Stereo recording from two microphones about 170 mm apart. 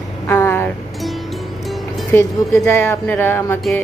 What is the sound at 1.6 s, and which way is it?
Music, centre (ahead or behind).